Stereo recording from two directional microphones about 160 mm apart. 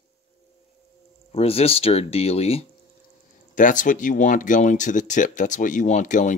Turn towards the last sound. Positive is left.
turn(degrees=50)  # may be behind; listen again after turning